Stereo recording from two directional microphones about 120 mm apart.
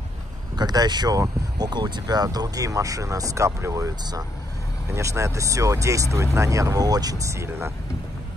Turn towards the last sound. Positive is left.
turn(degrees=-20)  # may be behind; listen again after turning